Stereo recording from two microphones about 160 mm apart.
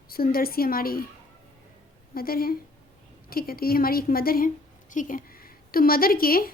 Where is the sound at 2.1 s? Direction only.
65° left (ahead or behind).